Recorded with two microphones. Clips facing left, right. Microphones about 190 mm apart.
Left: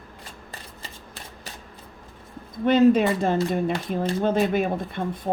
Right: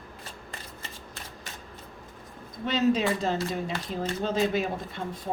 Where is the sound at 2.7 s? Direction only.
55° left (ahead or behind).